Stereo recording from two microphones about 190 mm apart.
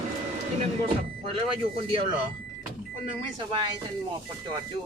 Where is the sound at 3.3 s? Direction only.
25° right (ahead or behind).